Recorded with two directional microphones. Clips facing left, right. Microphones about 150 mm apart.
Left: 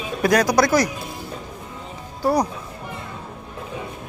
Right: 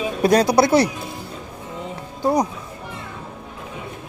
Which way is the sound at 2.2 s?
20° right (ahead or behind).